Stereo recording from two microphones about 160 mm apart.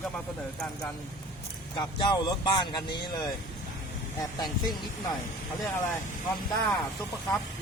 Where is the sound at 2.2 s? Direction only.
25° left (ahead or behind).